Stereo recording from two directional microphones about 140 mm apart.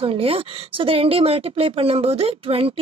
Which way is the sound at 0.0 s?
40° right (ahead or behind).